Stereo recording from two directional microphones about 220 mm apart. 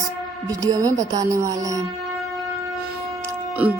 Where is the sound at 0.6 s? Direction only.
15° right (ahead or behind).